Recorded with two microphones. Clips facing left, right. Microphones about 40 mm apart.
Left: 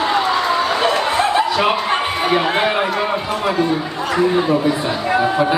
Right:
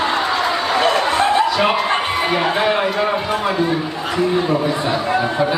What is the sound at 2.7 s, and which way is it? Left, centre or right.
Speech, centre.